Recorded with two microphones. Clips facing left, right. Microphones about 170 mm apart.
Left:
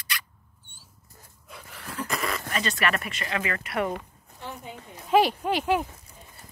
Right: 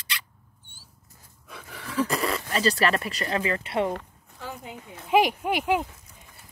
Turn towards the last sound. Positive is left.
turn(degrees=-15)  # may be behind; listen again after turning